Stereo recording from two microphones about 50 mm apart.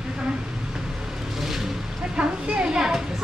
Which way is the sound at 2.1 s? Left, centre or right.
Centre.